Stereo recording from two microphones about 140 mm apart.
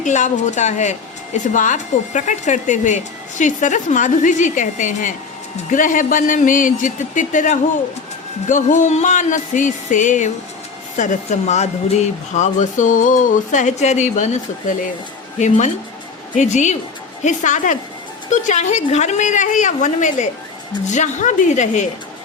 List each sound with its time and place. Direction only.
0.0 s a woman's voice: 60° left (ahead or behind)
15.4 s a woman's voice: 60° left (ahead or behind)